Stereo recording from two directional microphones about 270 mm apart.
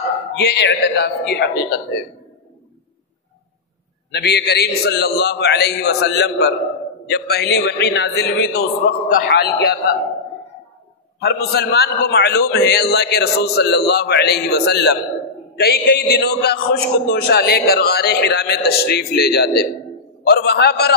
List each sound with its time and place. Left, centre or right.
0.4 s a man's voice: left
4.1 s a man's voice: left
11.1 s a man's voice: left